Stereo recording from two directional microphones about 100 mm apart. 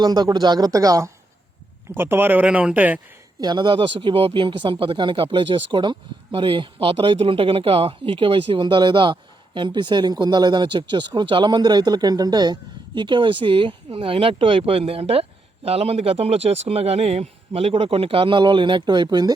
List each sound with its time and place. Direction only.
0.0 s speech: 40° right (ahead or behind)
2.0 s speech: 20° right (ahead or behind)
3.4 s speech: 50° right (ahead or behind)